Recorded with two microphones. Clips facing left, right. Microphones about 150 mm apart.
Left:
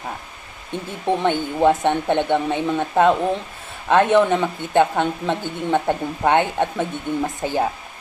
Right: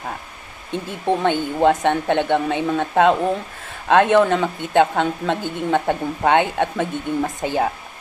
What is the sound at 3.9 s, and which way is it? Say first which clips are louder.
Speech: right 1 dB; 15° left (ahead or behind).